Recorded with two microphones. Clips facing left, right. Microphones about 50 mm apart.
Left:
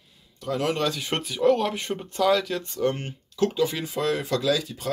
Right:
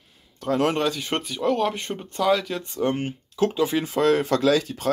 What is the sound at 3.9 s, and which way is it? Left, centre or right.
Speech, right.